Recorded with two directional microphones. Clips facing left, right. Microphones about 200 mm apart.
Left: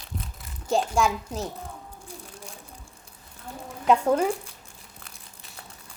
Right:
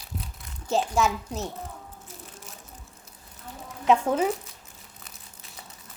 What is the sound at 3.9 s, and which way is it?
Speech, 5° right (ahead or behind).